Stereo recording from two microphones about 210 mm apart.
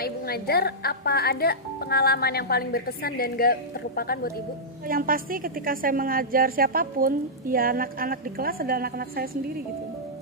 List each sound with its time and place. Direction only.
0.0 s speech: 45° left (ahead or behind)
4.8 s a woman's voice: 45° right (ahead or behind)